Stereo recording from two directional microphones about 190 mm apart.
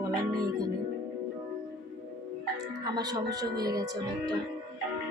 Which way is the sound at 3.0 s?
20° right (ahead or behind).